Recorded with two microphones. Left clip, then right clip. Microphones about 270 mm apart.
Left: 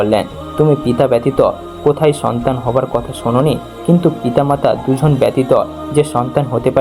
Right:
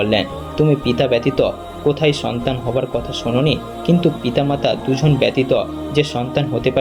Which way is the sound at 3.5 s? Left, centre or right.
Left.